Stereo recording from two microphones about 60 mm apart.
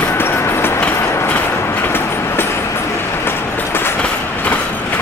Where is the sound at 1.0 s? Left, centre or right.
Left.